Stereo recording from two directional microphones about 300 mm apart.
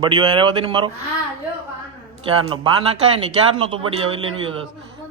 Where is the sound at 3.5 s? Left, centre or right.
Centre.